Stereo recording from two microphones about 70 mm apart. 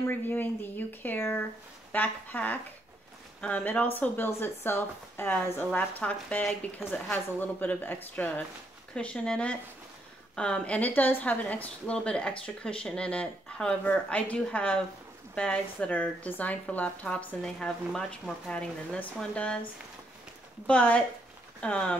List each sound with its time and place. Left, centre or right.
0.0 s speech: left
5.7 s speech: centre
8.9 s a woman's voice: centre
20.6 s a woman's voice: centre